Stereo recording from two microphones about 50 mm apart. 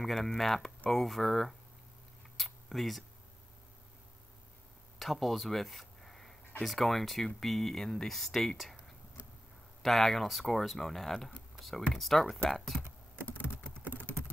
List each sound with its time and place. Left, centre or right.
0.0 s speech: centre
2.3 s a sound: centre
4.9 s a sound: centre
6.6 s speech: centre
9.8 s speech: centre
13.8 s typing: left